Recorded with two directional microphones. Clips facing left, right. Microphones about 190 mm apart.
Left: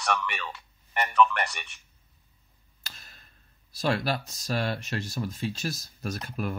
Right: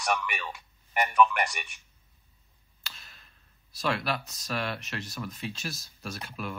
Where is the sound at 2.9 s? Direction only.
40° left (ahead or behind).